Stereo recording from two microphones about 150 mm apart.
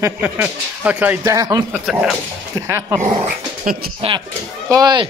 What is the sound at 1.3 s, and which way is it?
Speech, 20° right (ahead or behind).